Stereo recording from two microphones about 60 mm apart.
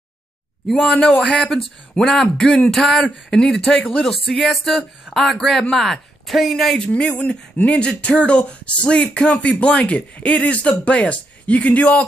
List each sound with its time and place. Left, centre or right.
0.7 s a man's voice: centre
2.4 s speech: left
2.7 s a man's voice: centre
6.9 s speech: left